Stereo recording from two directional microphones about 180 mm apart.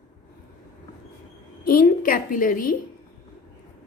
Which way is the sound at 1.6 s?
55° left (ahead or behind).